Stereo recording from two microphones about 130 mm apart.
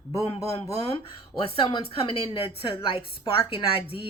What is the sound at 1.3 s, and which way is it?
A woman's voice, 40° left (ahead or behind).